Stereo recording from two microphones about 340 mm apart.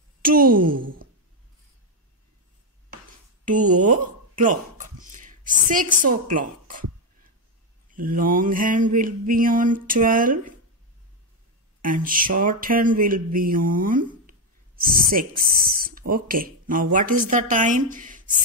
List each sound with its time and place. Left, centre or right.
0.2 s a woman's voice: right
3.4 s a sound: right
7.9 s mantra: right
11.8 s mantra: right